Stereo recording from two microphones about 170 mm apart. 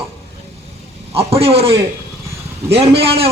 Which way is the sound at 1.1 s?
35° right (ahead or behind).